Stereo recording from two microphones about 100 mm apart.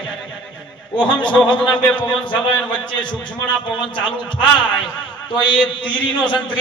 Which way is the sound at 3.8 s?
55° left (ahead or behind).